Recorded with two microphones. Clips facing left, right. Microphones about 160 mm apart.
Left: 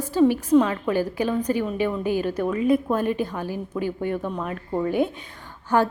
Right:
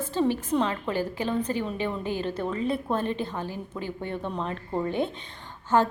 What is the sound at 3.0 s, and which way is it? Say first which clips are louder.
Speech: left 5 dB; 10° left (ahead or behind).